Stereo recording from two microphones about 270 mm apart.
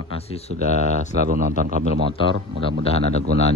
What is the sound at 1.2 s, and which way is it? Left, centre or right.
Speech, right.